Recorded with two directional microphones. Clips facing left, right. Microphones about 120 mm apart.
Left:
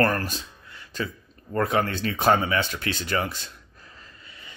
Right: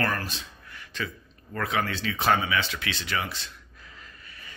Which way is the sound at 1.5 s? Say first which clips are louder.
Left 5 dB; 45° left (ahead or behind).